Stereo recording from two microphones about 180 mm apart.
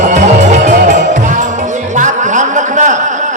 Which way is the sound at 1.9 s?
45° right (ahead or behind).